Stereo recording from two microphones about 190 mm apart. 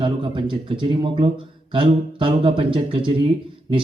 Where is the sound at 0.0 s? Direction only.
25° right (ahead or behind).